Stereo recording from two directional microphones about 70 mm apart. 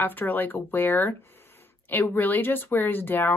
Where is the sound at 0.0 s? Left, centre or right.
Left.